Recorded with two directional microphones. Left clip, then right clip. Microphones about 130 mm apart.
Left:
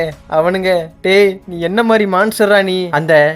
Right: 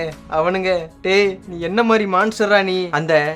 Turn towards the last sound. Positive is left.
turn(degrees=25)  # may be behind; listen again after turning